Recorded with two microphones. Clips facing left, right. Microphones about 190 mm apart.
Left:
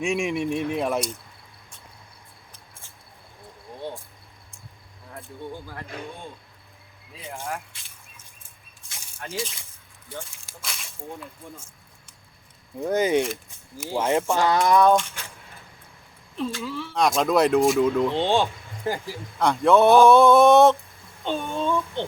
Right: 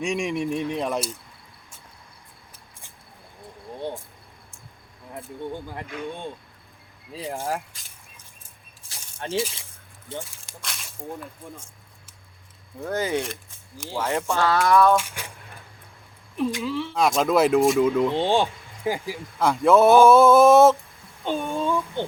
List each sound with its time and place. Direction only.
0.0 s speech: centre (ahead or behind)
3.8 s cricket: 15° right (ahead or behind)
7.1 s speech: 35° right (ahead or behind)
8.9 s rattle: 30° right (ahead or behind)
10.1 s speech: 25° right (ahead or behind)
10.4 s snake: centre (ahead or behind)
12.8 s speech: 20° left (ahead or behind)
14.9 s speech: 10° right (ahead or behind)
16.3 s speech: 15° right (ahead or behind)
16.9 s speech: centre (ahead or behind)